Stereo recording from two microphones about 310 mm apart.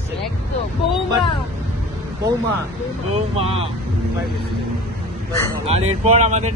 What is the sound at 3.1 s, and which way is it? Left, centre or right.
Speech, centre.